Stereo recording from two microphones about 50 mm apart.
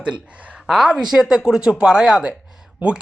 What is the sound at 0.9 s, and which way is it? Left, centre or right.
Speech, centre.